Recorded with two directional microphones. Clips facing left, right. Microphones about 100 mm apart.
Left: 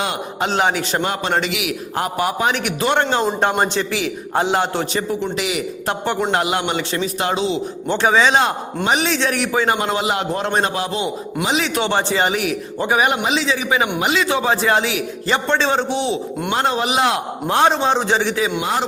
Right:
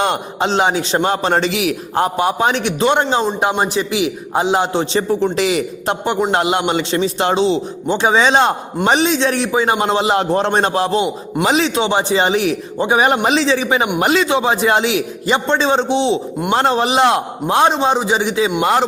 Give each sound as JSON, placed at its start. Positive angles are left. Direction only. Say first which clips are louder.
{"t": 0.3, "sound": "a man's voice", "louder": "right 1 dB", "side_deg": -25}
{"t": 5.2, "sound": "a man's voice", "louder": "right 6 dB", "side_deg": -35}
{"t": 5.8, "sound": "a man's voice", "louder": "even", "side_deg": -20}
{"t": 7.9, "sound": "a man's voice", "louder": "right 2 dB", "side_deg": -20}
{"t": 9.0, "sound": "a man's voice", "louder": "right 3 dB", "side_deg": -20}
{"t": 11.6, "sound": "a man's voice", "louder": "right 3 dB", "side_deg": -20}
{"t": 13.2, "sound": "a man's voice", "louder": "right 5 dB", "side_deg": -45}
{"t": 13.5, "sound": "a man's voice", "louder": "right 3 dB", "side_deg": -30}
{"t": 16.5, "sound": "a man's voice", "louder": "right 4 dB", "side_deg": -35}
{"t": 17.5, "sound": "a man's voice", "louder": "right 2 dB", "side_deg": -20}
{"t": 18.6, "sound": "speech", "louder": "right 6 dB", "side_deg": -60}